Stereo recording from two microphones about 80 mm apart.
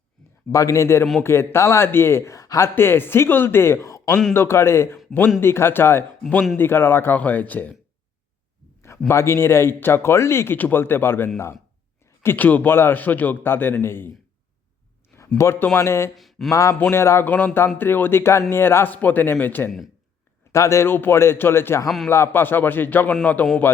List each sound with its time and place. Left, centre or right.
0.5 s speech: left
2.7 s speech: left
3.8 s a sound: left
4.4 s speech: left
9.0 s speech: left
15.4 s speech: left
16.1 s a sound: centre
16.5 s speech: left
20.5 s speech: left
21.8 s a man's voice: centre
22.1 s speech: left